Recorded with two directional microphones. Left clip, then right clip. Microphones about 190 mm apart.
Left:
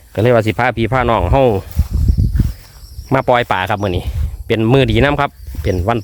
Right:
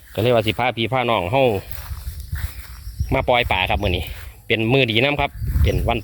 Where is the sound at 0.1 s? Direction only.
40° left (ahead or behind).